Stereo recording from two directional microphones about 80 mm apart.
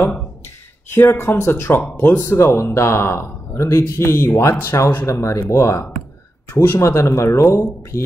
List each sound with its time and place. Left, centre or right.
0.8 s speech: left